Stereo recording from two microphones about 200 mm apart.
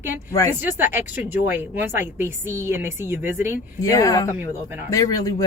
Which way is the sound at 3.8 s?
15° left (ahead or behind).